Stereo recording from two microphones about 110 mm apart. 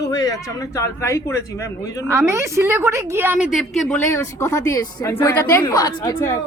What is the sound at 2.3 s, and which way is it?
A woman's voice, 25° right (ahead or behind).